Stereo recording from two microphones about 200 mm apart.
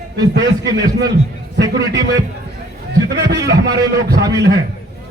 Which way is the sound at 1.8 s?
15° right (ahead or behind).